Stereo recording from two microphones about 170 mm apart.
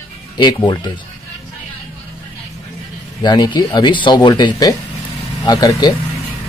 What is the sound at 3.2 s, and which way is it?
Speech, 25° left (ahead or behind).